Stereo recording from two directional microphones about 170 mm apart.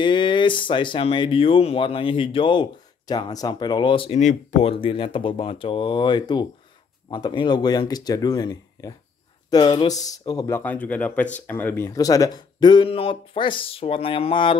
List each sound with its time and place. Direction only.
0.0 s speech: 30° left (ahead or behind)
4.2 s speech: 45° left (ahead or behind); by 10.6 s 20° left (ahead or behind)
10.6 s speech: 10° left (ahead or behind); by 14.6 s 30° left (ahead or behind)